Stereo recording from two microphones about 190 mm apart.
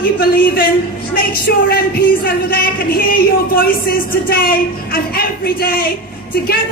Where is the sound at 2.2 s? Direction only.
50° left (ahead or behind).